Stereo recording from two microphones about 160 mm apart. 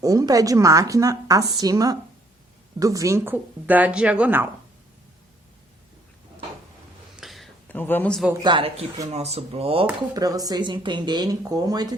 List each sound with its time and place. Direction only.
0.0 s a woman's voice: 20° right (ahead or behind)
7.2 s a sound: centre (ahead or behind)
7.7 s a man's voice: 10° left (ahead or behind)
8.3 s a woman's voice: 25° right (ahead or behind)
9.1 s speech: 40° right (ahead or behind)
10.2 s a woman's voice: 20° right (ahead or behind)